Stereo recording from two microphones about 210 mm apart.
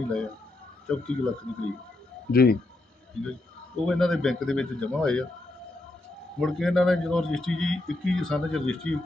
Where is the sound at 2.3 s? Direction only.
45° left (ahead or behind).